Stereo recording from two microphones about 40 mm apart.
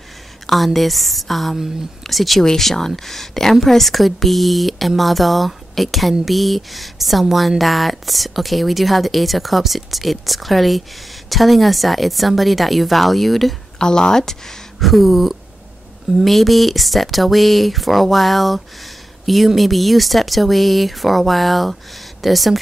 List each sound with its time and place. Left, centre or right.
0.7 s a woman's voice: centre
13.7 s speech: centre
14.8 s a woman's voice: centre